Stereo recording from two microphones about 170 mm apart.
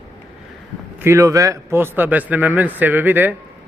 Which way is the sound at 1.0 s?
20° right (ahead or behind).